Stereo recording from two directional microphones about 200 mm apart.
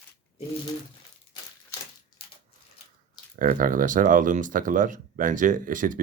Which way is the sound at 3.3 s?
45° right (ahead or behind).